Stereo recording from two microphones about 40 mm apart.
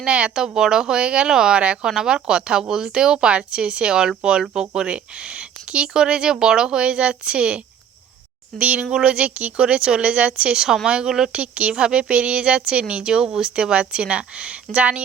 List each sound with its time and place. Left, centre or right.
0.0 s speech: right
0.3 s speech: centre
11.1 s speech: centre
11.3 s speech: right